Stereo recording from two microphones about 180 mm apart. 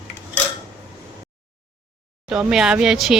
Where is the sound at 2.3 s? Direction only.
5° right (ahead or behind).